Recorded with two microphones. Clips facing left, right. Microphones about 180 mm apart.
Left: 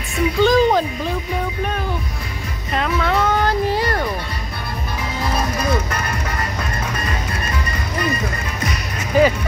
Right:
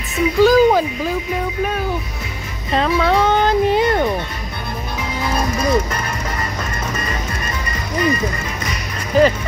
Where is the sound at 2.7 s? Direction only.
30° right (ahead or behind).